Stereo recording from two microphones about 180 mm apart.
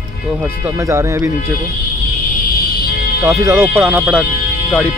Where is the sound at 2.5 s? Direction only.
60° left (ahead or behind).